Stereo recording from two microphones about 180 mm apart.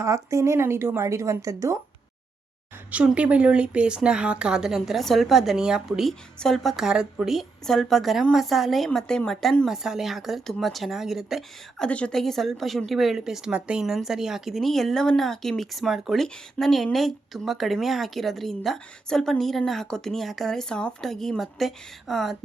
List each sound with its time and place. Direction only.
0.0 s a woman's voice: 15° right (ahead or behind)
2.9 s speech: 5° right (ahead or behind)